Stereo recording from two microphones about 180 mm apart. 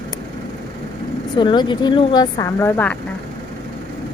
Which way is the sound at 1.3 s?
25° left (ahead or behind).